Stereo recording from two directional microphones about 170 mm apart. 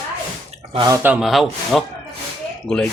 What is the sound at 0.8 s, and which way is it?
Speech, 20° right (ahead or behind).